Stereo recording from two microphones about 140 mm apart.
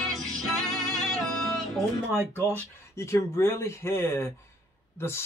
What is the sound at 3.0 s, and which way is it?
Speech, 20° left (ahead or behind).